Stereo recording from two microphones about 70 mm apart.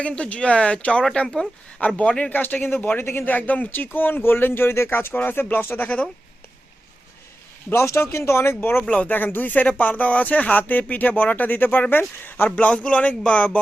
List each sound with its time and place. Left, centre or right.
0.0 s speech: centre
2.3 s speech: left
7.7 s speech: left
8.9 s speech: left
12.5 s speech: centre